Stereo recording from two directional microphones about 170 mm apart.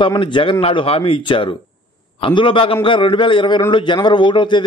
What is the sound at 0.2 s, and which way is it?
A man's voice, 30° left (ahead or behind).